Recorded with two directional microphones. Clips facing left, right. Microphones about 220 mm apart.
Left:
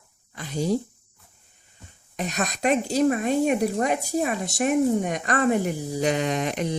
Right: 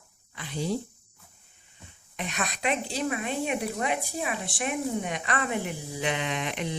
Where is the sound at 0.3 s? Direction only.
40° left (ahead or behind).